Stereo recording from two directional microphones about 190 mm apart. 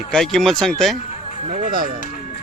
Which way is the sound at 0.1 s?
5° left (ahead or behind).